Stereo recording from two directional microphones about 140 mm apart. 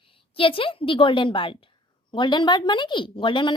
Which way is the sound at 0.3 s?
40° left (ahead or behind).